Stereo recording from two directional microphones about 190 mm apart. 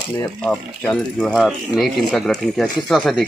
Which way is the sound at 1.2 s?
Centre (ahead or behind).